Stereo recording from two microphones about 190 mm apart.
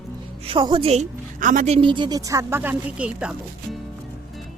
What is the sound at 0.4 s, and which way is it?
A woman's voice, 25° right (ahead or behind).